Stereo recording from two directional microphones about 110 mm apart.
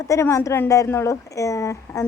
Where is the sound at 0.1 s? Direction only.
25° left (ahead or behind).